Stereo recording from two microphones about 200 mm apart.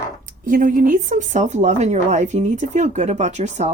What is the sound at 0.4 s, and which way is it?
Speech, 40° right (ahead or behind).